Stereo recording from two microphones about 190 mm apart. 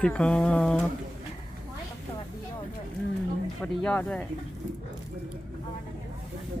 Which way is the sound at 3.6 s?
5° left (ahead or behind).